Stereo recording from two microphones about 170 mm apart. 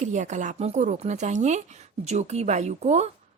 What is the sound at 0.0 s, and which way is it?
A woman's voice, 45° right (ahead or behind).